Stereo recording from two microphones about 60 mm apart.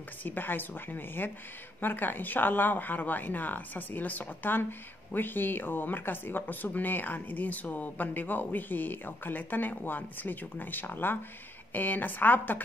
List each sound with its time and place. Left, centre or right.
0.2 s speech: left